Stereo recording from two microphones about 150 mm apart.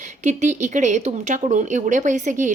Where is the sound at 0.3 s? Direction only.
55° right (ahead or behind).